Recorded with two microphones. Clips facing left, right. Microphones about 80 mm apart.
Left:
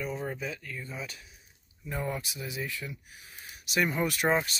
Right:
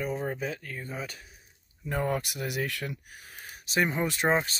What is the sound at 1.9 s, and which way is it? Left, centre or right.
Speech, right.